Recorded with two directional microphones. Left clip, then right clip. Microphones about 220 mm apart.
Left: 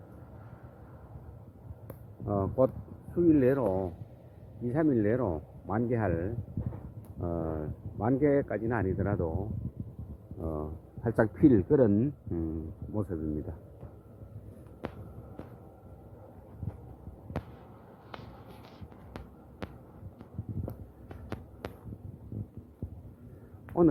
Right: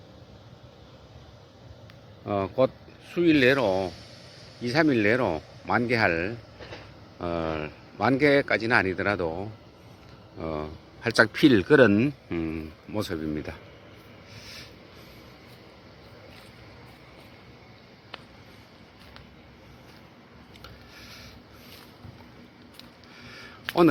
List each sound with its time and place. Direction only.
2.2 s speech: 15° right (ahead or behind)
11.0 s speech: 5° right (ahead or behind)
11.7 s speech: 20° right (ahead or behind)
23.6 s a sound: 20° right (ahead or behind)